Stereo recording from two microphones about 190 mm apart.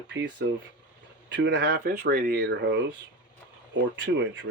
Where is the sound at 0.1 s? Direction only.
70° right (ahead or behind).